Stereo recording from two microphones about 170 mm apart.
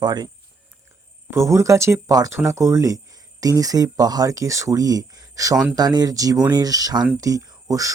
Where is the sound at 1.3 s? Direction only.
15° right (ahead or behind).